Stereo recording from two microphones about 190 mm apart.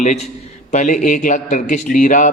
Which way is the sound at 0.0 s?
40° left (ahead or behind).